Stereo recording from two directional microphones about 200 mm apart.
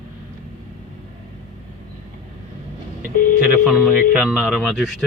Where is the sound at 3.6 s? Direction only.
5° right (ahead or behind).